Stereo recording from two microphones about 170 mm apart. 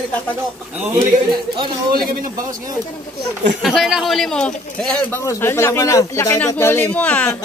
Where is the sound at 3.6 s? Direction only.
Centre (ahead or behind).